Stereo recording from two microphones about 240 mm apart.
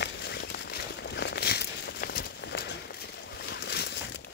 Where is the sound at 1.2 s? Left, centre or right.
Left.